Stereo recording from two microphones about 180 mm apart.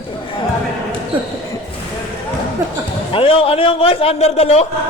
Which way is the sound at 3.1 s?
30° left (ahead or behind).